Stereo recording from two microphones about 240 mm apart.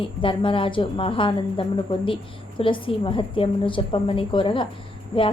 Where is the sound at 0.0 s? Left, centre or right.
Left.